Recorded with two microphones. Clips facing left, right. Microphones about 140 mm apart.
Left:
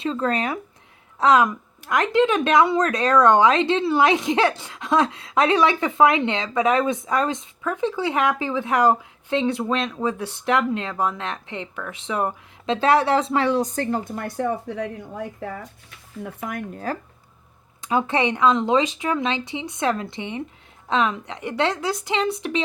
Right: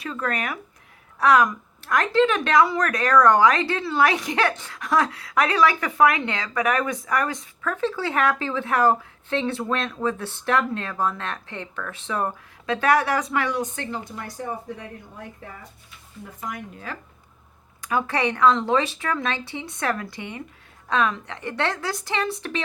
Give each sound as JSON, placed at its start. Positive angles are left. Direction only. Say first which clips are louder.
{"t": 0.0, "sound": "speech", "louder": "left 5 dB", "side_deg": 25}
{"t": 14.0, "sound": "speech", "louder": "left 7 dB", "side_deg": 55}
{"t": 15.4, "sound": "speech", "louder": "left 9 dB", "side_deg": 90}
{"t": 16.2, "sound": "speech", "louder": "left 4 dB", "side_deg": 60}
{"t": 16.9, "sound": "speech", "louder": "left 8 dB", "side_deg": 40}
{"t": 17.7, "sound": "speech", "louder": "left 3 dB", "side_deg": 25}